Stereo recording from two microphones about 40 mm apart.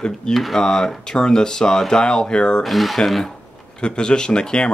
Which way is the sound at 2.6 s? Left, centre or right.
Centre.